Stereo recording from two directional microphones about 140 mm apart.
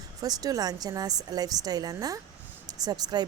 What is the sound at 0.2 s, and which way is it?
A woman's voice, 25° right (ahead or behind).